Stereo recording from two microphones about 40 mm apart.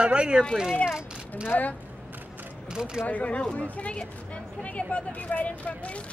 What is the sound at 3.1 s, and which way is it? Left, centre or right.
Speech, left.